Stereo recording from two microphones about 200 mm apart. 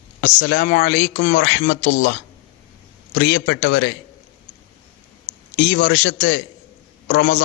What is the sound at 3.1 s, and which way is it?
Speech, 65° left (ahead or behind).